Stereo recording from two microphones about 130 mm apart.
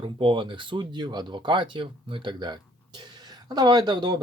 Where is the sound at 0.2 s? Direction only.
40° right (ahead or behind).